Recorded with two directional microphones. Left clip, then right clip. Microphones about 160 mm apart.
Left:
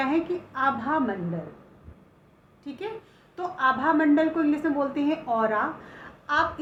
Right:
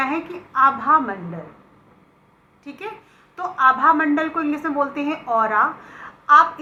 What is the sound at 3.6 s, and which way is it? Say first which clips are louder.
A woman's voice: right 6 dB; 30° left (ahead or behind).